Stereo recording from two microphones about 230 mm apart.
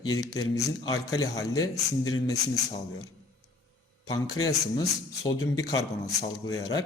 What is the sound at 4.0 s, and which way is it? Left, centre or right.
A man's voice, centre.